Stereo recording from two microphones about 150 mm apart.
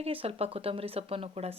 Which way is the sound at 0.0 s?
40° right (ahead or behind).